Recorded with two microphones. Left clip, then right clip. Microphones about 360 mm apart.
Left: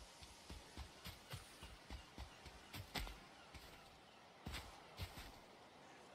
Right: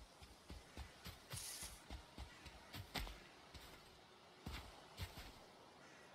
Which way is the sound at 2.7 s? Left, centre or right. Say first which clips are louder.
Even; centre.